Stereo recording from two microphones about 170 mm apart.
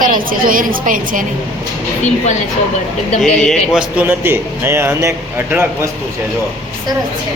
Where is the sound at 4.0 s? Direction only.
15° right (ahead or behind).